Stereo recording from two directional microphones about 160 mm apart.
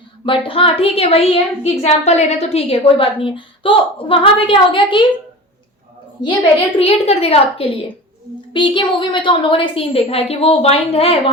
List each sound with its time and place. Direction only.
0.3 s a woman's voice: 35° left (ahead or behind)
6.7 s a woman's voice: 40° left (ahead or behind)